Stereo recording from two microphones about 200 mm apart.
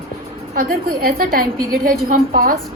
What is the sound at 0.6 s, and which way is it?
A woman's voice, 45° right (ahead or behind).